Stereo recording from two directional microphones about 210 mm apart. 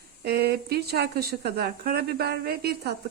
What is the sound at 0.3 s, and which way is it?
Speech, 50° right (ahead or behind).